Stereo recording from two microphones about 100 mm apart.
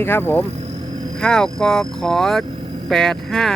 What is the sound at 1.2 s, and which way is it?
Speech, 5° left (ahead or behind).